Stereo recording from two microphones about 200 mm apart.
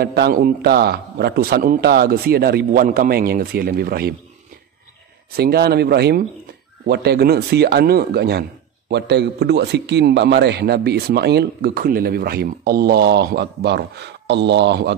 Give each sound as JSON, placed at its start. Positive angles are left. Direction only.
{"t": 0.0, "sound": "a man's voice", "side_deg": -50}
{"t": 5.3, "sound": "a man's voice", "side_deg": -50}